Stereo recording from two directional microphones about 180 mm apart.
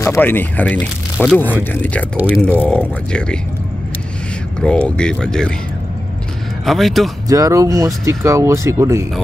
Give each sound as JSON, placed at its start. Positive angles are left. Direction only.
{"t": 0.0, "sound": "speech", "side_deg": 15}
{"t": 1.1, "sound": "speech", "side_deg": 0}
{"t": 1.4, "sound": "speech", "side_deg": 10}
{"t": 2.1, "sound": "speech", "side_deg": -10}
{"t": 3.1, "sound": "speech", "side_deg": 5}
{"t": 4.6, "sound": "speech", "side_deg": 5}
{"t": 6.6, "sound": "speech", "side_deg": 0}
{"t": 7.2, "sound": "speech", "side_deg": -20}